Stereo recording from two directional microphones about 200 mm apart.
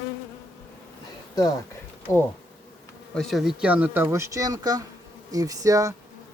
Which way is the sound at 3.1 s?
Centre (ahead or behind).